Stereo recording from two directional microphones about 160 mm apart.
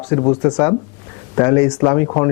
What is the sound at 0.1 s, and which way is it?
Speech, 20° left (ahead or behind).